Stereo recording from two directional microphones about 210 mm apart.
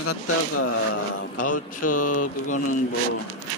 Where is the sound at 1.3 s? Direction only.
40° left (ahead or behind).